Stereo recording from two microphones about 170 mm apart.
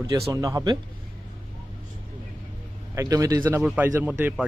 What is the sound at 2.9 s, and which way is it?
Speech, 20° right (ahead or behind).